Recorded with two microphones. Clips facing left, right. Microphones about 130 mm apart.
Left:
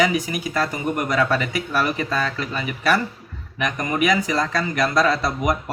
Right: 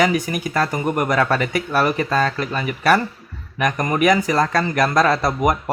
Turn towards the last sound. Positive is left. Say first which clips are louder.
# right 3 dB
turn(degrees=-50)  # may be behind; listen again after turning